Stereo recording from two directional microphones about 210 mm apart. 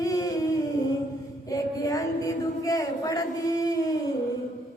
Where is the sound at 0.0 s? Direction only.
15° left (ahead or behind).